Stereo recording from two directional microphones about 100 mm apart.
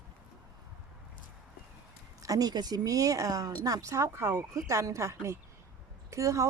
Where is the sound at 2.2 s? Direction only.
40° right (ahead or behind).